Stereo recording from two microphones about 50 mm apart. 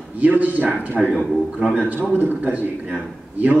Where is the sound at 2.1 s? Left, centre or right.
Right.